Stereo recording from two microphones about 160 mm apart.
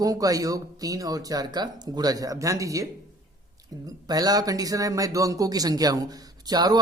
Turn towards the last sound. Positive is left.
turn(degrees=-25)  # may be behind; listen again after turning